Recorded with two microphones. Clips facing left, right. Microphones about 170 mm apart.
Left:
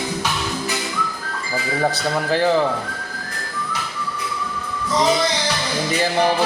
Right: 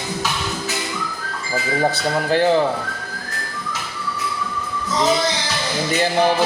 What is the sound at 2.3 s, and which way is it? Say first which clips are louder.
Music: right 2 dB; centre (ahead or behind).